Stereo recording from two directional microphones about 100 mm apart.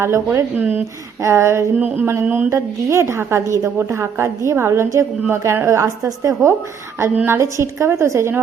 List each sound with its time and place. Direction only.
0.0 s a woman's voice: 25° right (ahead or behind)
2.5 s a woman's voice: 30° right (ahead or behind)